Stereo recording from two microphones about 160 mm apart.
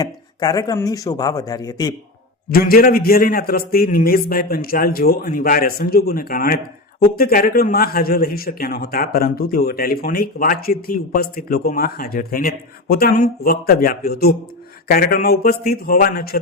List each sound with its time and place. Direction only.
0.0 s speech: 25° left (ahead or behind)
2.5 s a man's voice: 70° left (ahead or behind)